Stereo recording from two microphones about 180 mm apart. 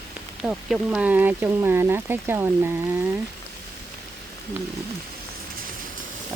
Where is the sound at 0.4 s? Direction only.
5° right (ahead or behind).